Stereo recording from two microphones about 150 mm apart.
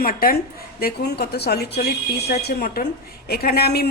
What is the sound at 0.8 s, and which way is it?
A woman's voice, 90° left.